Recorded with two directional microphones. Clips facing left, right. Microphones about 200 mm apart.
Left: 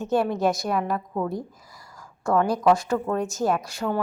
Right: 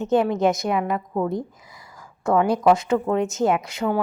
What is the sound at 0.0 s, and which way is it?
Speech, 20° right (ahead or behind).